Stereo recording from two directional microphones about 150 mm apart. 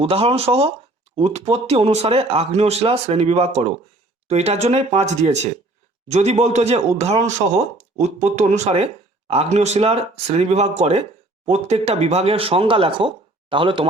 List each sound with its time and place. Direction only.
0.0 s speech: 40° right (ahead or behind)